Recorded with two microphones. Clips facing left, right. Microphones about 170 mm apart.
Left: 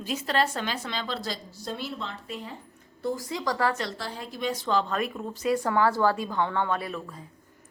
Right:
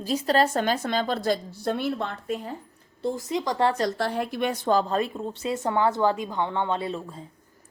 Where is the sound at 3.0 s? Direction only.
25° right (ahead or behind).